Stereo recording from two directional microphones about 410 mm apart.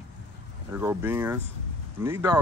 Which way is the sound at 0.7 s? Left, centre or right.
Centre.